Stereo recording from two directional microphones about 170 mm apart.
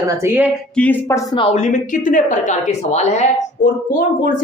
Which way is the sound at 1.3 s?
35° left (ahead or behind).